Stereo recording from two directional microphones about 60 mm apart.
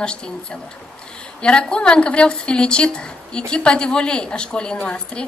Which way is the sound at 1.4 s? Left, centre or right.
Centre.